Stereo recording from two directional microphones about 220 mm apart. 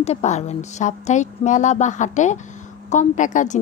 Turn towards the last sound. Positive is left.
turn(degrees=35)  # may be behind; listen again after turning